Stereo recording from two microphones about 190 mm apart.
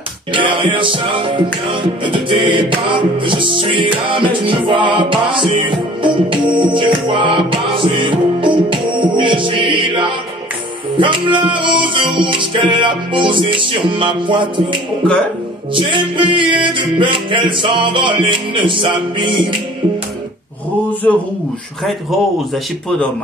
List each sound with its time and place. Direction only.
0.3 s music: 25° right (ahead or behind)